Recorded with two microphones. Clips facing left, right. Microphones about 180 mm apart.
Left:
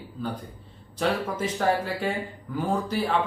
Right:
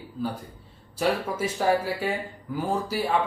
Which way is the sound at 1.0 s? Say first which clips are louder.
Right 1 dB; 10° right (ahead or behind).